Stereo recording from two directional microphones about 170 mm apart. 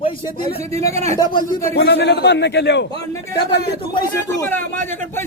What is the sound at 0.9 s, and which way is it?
Speech, 40° right (ahead or behind).